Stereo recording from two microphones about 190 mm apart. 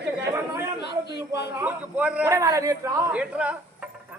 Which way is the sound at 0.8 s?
60° left (ahead or behind).